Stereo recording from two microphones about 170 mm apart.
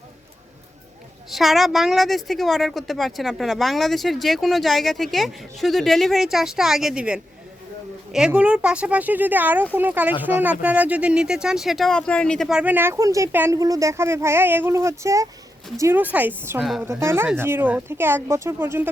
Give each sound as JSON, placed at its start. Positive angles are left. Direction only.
{"t": 1.3, "sound": "a woman's voice", "side_deg": 0}